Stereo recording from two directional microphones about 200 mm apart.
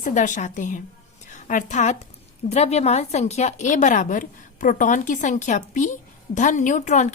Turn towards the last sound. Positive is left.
turn(degrees=35)  # may be behind; listen again after turning